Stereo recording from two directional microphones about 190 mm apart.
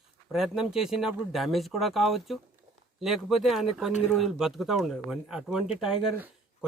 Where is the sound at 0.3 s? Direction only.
Centre (ahead or behind).